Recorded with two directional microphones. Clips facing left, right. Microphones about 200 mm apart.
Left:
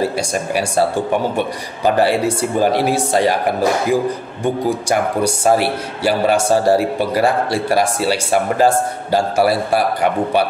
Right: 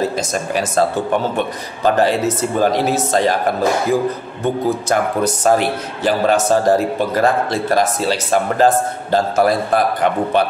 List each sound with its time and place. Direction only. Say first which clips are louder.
0.0 s speech: even; 10° left (ahead or behind)